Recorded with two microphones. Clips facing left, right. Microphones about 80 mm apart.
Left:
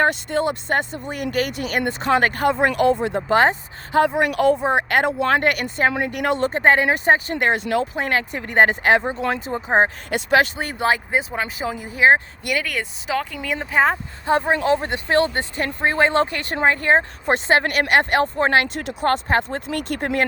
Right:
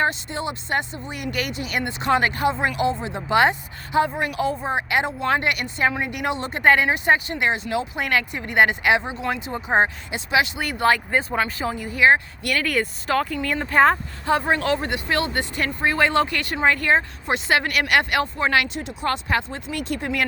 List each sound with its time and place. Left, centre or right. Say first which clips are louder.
0.0 s speech: left 5 dB; left
3.2 s speech: left 1 dB; left
4.0 s speech: left 6 dB; left
4.6 s speech: left 4 dB; left
7.9 s speech: left 1 dB; left
9.6 s speech: left 2 dB; left
10.1 s speech: left 4 dB; left
10.6 s speech: right 1 dB; left
12.6 s speech: right 3 dB; centre
14.3 s speech: left 2 dB; left
17.2 s speech: left 3 dB; left
18.7 s speech: left 5 dB; left